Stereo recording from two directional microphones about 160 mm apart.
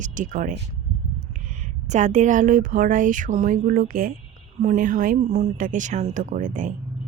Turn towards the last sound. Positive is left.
turn(degrees=-55)  # may be behind; listen again after turning